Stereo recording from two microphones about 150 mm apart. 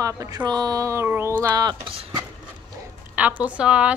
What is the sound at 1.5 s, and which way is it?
Speech, 30° right (ahead or behind).